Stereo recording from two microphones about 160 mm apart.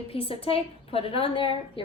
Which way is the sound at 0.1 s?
35° left (ahead or behind).